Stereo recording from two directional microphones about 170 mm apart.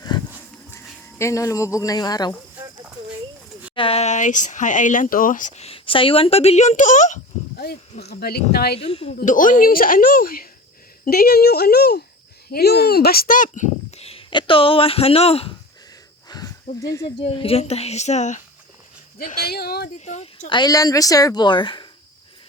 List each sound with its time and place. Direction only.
0.1 s a sound: 25° left (ahead or behind)
1.2 s speech: 15° left (ahead or behind)
3.8 s speech: 35° left (ahead or behind)
7.5 s speech: 65° left (ahead or behind)
8.9 s a woman's voice: 35° left (ahead or behind)
9.1 s a woman's voice: 50° left (ahead or behind)
16.3 s a sound: 25° left (ahead or behind)
16.8 s speech: 20° left (ahead or behind)
17.2 s a woman's voice: 30° left (ahead or behind)
19.2 s a woman's voice: 60° left (ahead or behind)
20.1 s speech: 40° left (ahead or behind)
20.5 s speech: 25° left (ahead or behind)